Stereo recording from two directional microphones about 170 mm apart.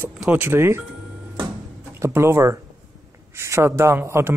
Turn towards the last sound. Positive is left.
turn(degrees=-15)  # may be behind; listen again after turning